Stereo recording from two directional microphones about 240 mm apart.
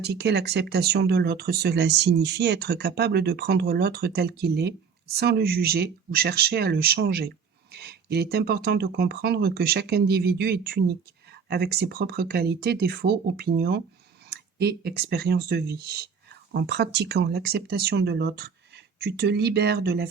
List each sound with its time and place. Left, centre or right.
0.0 s speech: right